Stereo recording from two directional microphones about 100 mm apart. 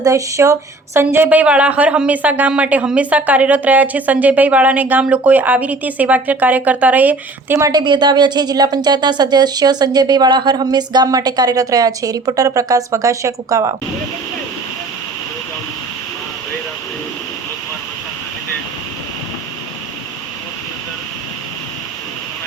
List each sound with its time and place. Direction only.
0.0 s speech: 30° right (ahead or behind)
0.9 s a woman's voice: 20° right (ahead or behind)
7.6 s speech: 45° right (ahead or behind)